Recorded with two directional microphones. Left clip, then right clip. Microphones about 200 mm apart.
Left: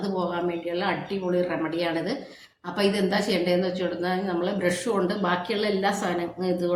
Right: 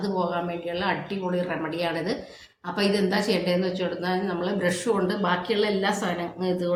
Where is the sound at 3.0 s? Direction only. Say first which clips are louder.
Even; 5° right (ahead or behind).